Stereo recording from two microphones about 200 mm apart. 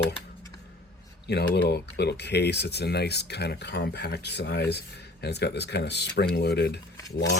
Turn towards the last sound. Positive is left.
turn(degrees=60)  # may be behind; listen again after turning